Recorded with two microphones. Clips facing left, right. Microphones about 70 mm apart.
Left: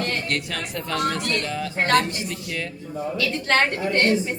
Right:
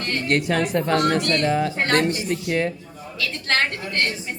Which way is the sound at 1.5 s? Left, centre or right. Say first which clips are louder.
Right 7 dB; right.